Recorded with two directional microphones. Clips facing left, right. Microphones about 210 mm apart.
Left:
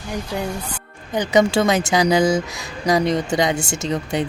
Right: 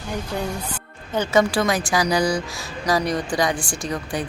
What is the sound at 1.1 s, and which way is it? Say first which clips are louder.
Speech: left 2 dB; 15° left (ahead or behind).